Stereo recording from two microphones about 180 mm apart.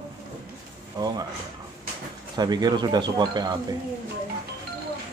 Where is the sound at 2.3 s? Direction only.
25° right (ahead or behind).